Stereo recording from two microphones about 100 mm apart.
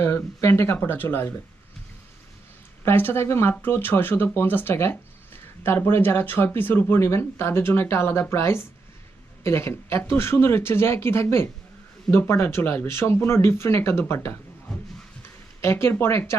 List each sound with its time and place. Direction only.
0.0 s speech: 25° left (ahead or behind)
2.8 s speech: 20° left (ahead or behind)
15.6 s speech: 25° left (ahead or behind)